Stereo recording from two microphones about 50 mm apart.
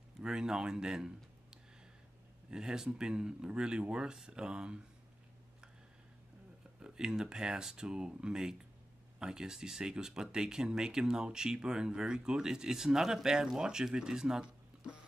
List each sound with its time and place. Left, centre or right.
0.2 s speech: centre
6.8 s speech: centre